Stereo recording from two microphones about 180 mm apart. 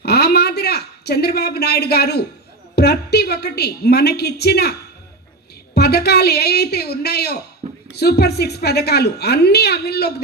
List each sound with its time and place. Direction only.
0.0 s a sound: 60° left (ahead or behind)
2.7 s a woman's voice: 65° left (ahead or behind)
5.7 s a woman's voice: 65° left (ahead or behind)